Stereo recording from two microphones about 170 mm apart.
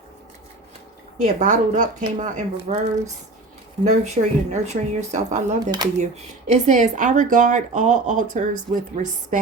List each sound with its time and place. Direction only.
1.2 s speech: 50° right (ahead or behind)
3.8 s speech: 40° right (ahead or behind)